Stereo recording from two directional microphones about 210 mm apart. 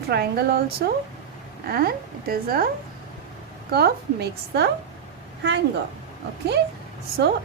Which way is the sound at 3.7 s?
50° right (ahead or behind).